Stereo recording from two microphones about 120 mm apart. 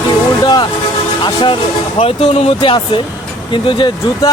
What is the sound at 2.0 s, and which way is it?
Speech, 60° left (ahead or behind).